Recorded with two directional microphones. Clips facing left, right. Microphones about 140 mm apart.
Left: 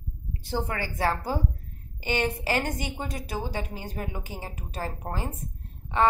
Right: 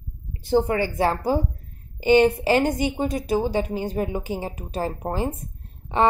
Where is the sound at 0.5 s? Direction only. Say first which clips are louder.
Right 10 dB; 20° right (ahead or behind).